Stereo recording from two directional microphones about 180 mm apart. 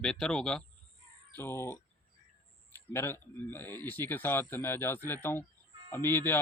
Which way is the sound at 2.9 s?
15° left (ahead or behind).